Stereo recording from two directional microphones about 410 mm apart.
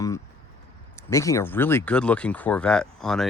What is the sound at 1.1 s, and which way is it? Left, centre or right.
Speech, centre.